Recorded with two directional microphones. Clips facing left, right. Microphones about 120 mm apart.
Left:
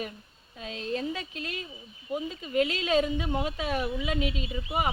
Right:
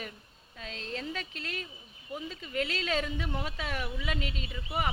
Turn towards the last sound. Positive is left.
turn(degrees=15)  # may be behind; listen again after turning